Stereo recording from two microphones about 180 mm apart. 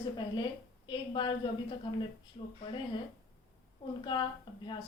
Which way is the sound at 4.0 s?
25° left (ahead or behind).